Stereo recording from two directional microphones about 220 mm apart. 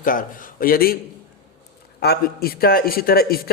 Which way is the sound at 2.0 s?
45° left (ahead or behind).